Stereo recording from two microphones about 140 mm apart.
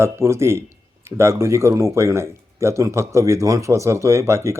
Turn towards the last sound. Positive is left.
turn(degrees=-20)  # may be behind; listen again after turning